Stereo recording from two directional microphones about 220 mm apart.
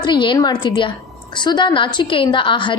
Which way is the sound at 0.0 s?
20° left (ahead or behind).